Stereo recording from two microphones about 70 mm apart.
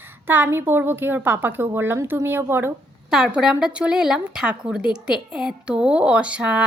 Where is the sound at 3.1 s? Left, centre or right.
Centre.